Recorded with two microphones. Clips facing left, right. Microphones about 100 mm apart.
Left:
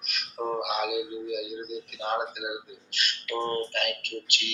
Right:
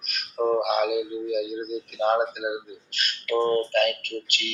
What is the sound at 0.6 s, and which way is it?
Speech, 45° right (ahead or behind).